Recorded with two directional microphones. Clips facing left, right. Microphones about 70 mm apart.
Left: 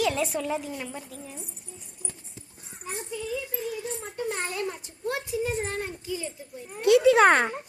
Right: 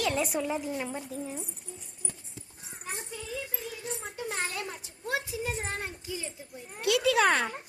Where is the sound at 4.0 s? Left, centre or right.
Centre.